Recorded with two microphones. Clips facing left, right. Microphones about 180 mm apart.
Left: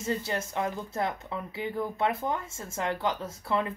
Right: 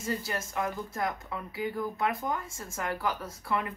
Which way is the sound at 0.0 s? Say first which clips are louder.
Left 3 dB; 25° left (ahead or behind).